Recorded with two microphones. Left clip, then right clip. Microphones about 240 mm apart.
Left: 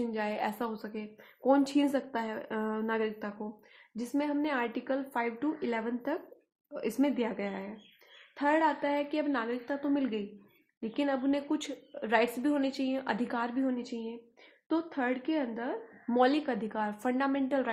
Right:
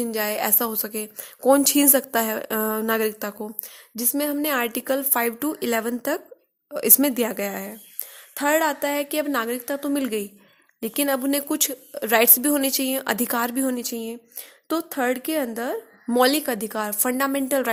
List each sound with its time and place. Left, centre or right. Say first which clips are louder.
0.1 s a woman's voice: right 8 dB; right